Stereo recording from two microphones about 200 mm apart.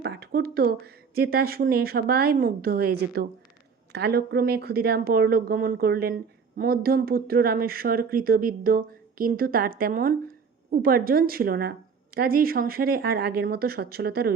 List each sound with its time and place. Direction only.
0.0 s speech: 55° right (ahead or behind)